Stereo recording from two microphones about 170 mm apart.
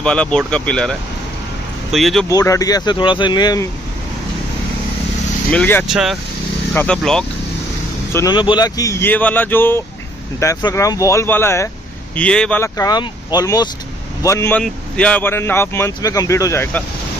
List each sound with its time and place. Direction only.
0.0 s speech: 5° left (ahead or behind)
2.2 s speech: 20° left (ahead or behind)
5.5 s speech: 10° left (ahead or behind)
5.9 s speech: 5° right (ahead or behind)
6.7 s speech: 10° left (ahead or behind)
8.1 s speech: 20° left (ahead or behind)